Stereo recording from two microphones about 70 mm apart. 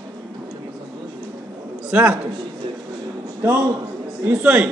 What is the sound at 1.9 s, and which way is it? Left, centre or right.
Speech, centre.